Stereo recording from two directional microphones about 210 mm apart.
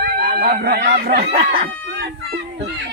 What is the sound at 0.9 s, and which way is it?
Speech, 40° right (ahead or behind).